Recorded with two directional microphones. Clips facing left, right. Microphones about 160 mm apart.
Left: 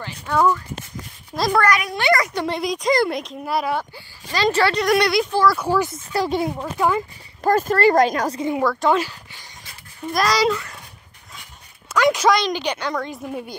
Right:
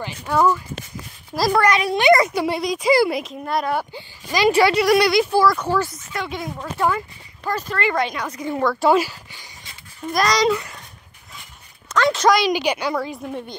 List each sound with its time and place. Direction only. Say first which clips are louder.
0.0 s a woman's voice: right 1 dB; 10° right (ahead or behind)
1.6 s a child's voice: right 4 dB; 25° right (ahead or behind)
2.3 s speech: right 2 dB; 10° right (ahead or behind)
3.9 s speech: right 3 dB; 15° right (ahead or behind)
5.5 s speech: left 1 dB; 10° left (ahead or behind)
5.9 s speech: left 7 dB; 30° left (ahead or behind)
6.5 s speech: left 1 dB; 15° left (ahead or behind)
7.4 s speech: left 7 dB; 45° left (ahead or behind)
8.8 s speech: right 4 dB; 10° right (ahead or behind)
10.1 s speech: right 1 dB; 5° left (ahead or behind)
11.9 s a sound: left 1 dB; 10° left (ahead or behind)
12.3 s speech: right 2 dB; 10° right (ahead or behind)